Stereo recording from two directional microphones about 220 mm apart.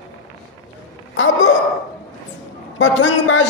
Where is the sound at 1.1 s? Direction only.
60° left (ahead or behind).